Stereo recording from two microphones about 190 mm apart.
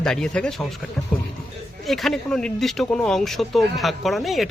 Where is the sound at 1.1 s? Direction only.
5° left (ahead or behind).